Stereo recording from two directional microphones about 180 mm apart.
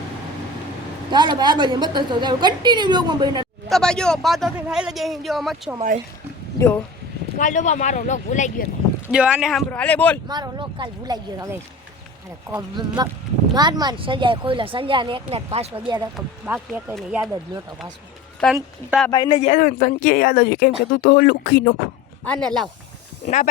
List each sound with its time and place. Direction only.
1.1 s a woman's voice: 25° right (ahead or behind)
3.7 s a man's voice: 5° left (ahead or behind)
7.3 s speech: 45° left (ahead or behind)
9.1 s a man's voice: 5° right (ahead or behind)
10.2 s a woman's voice: 25° right (ahead or behind)
12.5 s a woman's voice: 20° right (ahead or behind)
16.5 s a man's voice: 5° right (ahead or behind)
18.4 s a man's voice: 5° left (ahead or behind)
19.1 s speech: 25° left (ahead or behind)
19.5 s speech: 50° left (ahead or behind)
22.3 s a man's voice: 5° left (ahead or behind)
23.2 s speech: 40° left (ahead or behind)